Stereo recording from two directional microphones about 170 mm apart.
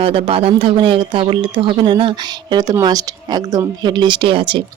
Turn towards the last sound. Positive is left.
turn(degrees=-30)  # may be behind; listen again after turning